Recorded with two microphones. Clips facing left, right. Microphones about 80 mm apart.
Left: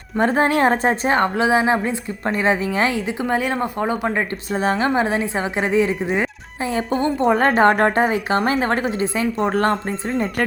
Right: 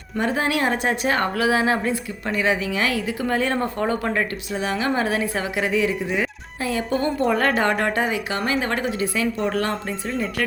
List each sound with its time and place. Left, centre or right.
0.2 s speech: left
2.3 s speech: left; by 4.3 s centre
4.5 s speech: left
4.9 s speech: left